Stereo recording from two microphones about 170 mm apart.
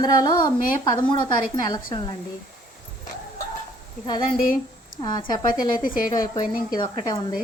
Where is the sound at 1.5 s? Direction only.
25° left (ahead or behind).